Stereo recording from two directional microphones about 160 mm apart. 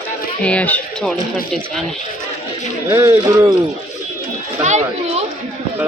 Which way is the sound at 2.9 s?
15° right (ahead or behind).